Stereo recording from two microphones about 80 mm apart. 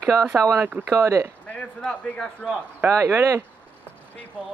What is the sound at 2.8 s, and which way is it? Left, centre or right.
Speech, right.